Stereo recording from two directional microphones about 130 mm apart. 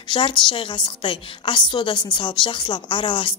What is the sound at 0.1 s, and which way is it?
A woman's voice, 35° left (ahead or behind).